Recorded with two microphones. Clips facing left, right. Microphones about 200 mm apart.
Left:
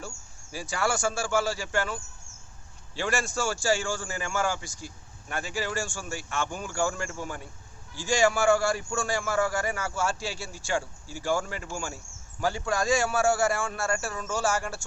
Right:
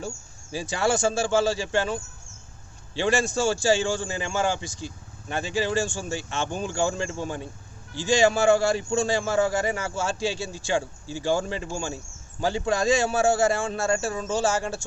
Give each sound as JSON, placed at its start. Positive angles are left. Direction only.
{"t": 0.5, "sound": "a man's voice", "side_deg": -20}